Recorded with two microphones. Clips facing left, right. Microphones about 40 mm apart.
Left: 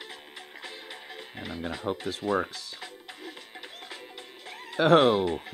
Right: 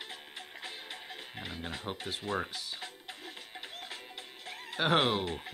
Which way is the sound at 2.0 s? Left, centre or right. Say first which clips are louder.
Left 7 dB; centre.